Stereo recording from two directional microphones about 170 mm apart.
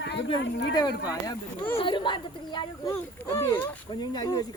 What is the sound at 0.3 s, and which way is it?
Speech, 90° left.